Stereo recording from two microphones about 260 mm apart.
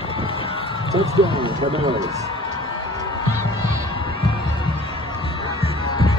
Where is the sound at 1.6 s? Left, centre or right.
Centre.